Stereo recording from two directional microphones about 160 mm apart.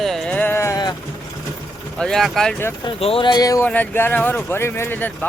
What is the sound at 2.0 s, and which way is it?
Speech, 5° left (ahead or behind).